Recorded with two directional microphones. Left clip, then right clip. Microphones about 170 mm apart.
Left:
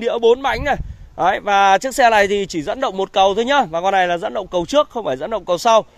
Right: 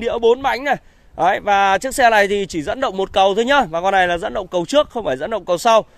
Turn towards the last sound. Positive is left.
turn(degrees=-15)  # may be behind; listen again after turning